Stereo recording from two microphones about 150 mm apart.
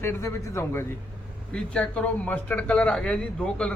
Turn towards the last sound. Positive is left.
turn(degrees=5)  # may be behind; listen again after turning